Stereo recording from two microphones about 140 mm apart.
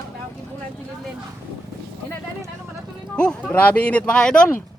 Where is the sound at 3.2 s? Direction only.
10° left (ahead or behind).